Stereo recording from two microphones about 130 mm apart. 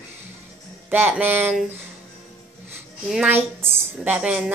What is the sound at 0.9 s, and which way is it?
Speech, 15° right (ahead or behind).